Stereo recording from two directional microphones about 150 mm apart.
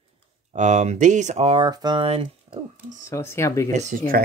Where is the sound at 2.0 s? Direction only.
40° right (ahead or behind).